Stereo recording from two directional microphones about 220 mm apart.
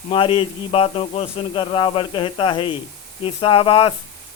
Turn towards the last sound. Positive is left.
turn(degrees=25)  # may be behind; listen again after turning